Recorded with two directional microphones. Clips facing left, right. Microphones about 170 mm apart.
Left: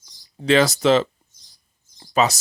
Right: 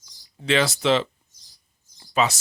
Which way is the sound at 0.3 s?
40° left (ahead or behind).